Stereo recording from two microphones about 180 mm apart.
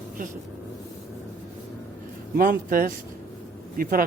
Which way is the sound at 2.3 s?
50° right (ahead or behind).